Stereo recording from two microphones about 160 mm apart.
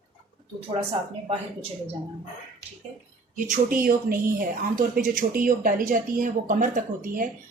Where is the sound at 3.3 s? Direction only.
60° right (ahead or behind).